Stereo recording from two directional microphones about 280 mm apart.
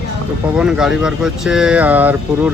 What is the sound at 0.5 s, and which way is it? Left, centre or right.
Speech, centre.